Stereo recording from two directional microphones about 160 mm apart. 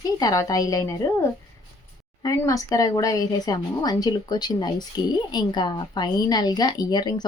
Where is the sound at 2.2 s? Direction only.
20° left (ahead or behind).